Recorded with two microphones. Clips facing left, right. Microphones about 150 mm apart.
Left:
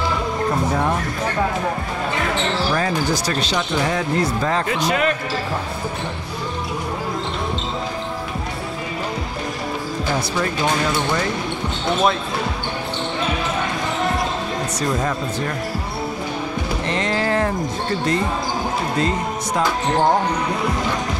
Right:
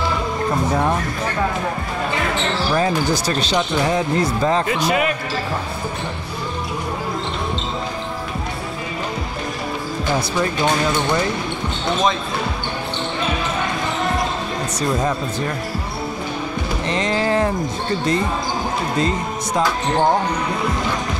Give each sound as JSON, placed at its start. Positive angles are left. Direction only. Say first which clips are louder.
{"t": 2.7, "sound": "speech", "louder": "right 2 dB", "side_deg": -20}
{"t": 4.7, "sound": "speech", "louder": "right 1 dB", "side_deg": -10}
{"t": 16.9, "sound": "speech", "louder": "right 2 dB", "side_deg": -20}